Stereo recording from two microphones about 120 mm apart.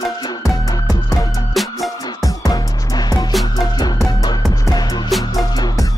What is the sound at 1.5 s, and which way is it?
Music, centre (ahead or behind).